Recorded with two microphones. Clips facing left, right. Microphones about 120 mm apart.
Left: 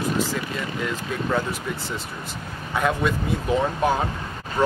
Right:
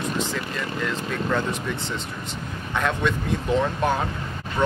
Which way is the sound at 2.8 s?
5° left (ahead or behind).